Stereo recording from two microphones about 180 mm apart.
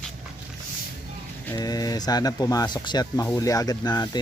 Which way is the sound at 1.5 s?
20° left (ahead or behind).